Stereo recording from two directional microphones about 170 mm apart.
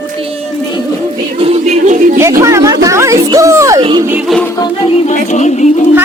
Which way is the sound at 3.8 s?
25° right (ahead or behind).